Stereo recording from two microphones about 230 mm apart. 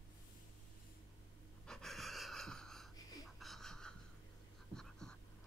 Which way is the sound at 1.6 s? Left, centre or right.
Centre.